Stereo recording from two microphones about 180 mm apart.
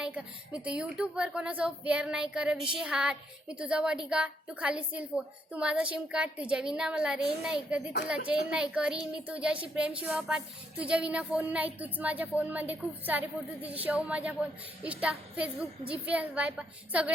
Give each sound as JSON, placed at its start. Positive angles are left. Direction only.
{"t": 0.0, "sound": "a woman's voice", "side_deg": -5}